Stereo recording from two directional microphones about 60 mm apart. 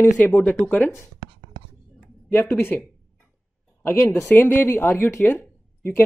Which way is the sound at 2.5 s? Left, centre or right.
Left.